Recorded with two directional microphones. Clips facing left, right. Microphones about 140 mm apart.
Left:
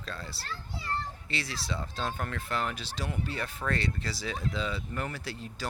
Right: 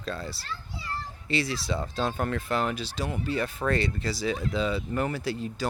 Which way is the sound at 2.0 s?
15° right (ahead or behind).